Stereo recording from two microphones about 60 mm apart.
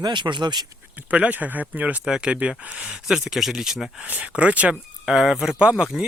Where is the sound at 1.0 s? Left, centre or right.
Right.